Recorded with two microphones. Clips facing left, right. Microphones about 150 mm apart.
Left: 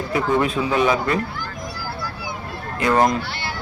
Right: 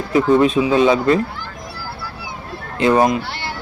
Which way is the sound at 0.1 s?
20° right (ahead or behind).